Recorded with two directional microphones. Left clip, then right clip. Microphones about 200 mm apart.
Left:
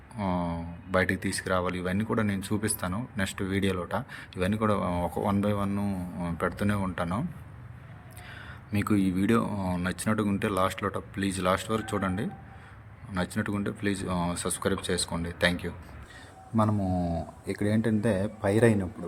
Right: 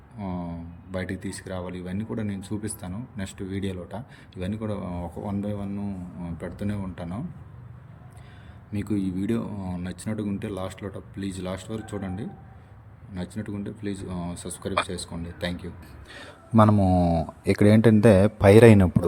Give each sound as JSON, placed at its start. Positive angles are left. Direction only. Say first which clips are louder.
{"t": 0.2, "sound": "speech", "louder": "left 5 dB", "side_deg": -5}
{"t": 8.7, "sound": "speech", "louder": "left 2 dB", "side_deg": -5}
{"t": 16.1, "sound": "speech", "louder": "right 8 dB", "side_deg": -35}
{"t": 17.4, "sound": "a man's voice", "louder": "right 10 dB", "side_deg": -35}